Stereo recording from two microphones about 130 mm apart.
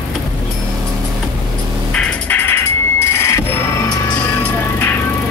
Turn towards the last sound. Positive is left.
turn(degrees=20)  # may be behind; listen again after turning